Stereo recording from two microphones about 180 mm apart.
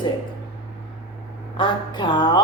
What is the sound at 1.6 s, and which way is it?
Speech, 25° left (ahead or behind).